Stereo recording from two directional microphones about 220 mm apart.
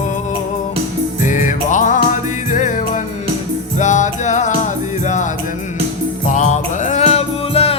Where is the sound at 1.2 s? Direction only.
35° left (ahead or behind).